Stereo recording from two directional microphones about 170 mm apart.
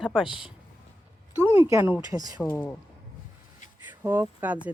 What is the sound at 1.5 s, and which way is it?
Speech, 15° right (ahead or behind).